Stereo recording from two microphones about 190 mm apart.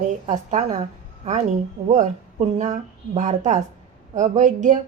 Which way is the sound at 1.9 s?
35° right (ahead or behind).